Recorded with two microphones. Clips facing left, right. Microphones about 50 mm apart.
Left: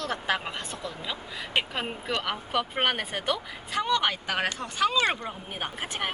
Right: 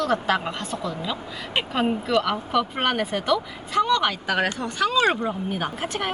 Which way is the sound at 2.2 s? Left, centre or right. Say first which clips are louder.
Right 6 dB; centre.